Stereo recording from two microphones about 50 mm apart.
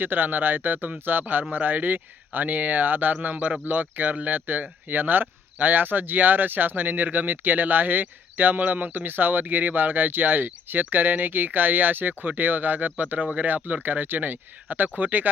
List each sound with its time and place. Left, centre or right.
0.0 s speech: right